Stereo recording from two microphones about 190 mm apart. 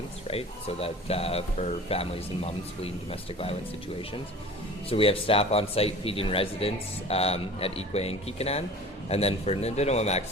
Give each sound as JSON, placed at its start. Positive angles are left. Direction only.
{"t": 0.3, "sound": "a man's voice", "side_deg": 30}
{"t": 4.9, "sound": "a man's voice", "side_deg": 30}